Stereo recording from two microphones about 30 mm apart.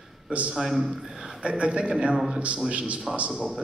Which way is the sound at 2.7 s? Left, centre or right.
Right.